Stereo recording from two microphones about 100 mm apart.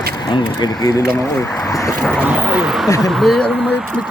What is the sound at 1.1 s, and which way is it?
Speech, 20° left (ahead or behind).